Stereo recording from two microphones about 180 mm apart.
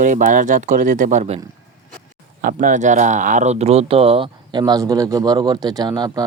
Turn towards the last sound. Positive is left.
turn(degrees=-25)  # may be behind; listen again after turning